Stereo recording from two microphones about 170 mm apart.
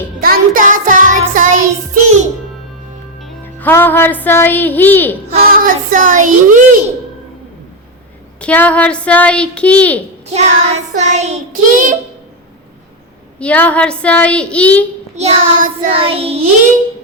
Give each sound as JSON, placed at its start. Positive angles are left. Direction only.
{"t": 0.2, "sound": "music", "side_deg": -55}
{"t": 3.4, "sound": "a woman's voice", "side_deg": 10}
{"t": 5.4, "sound": "a child's voice", "side_deg": -55}
{"t": 8.4, "sound": "a woman's voice", "side_deg": 10}
{"t": 10.3, "sound": "a child's voice", "side_deg": -40}
{"t": 13.4, "sound": "a woman's voice", "side_deg": 10}
{"t": 15.1, "sound": "a child's voice", "side_deg": -45}
{"t": 15.9, "sound": "child singing", "side_deg": -35}